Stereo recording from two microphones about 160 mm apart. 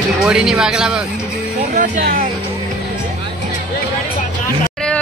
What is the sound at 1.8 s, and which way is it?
Speech, 60° right (ahead or behind).